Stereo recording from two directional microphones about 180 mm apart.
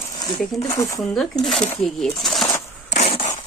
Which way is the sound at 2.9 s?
35° left (ahead or behind).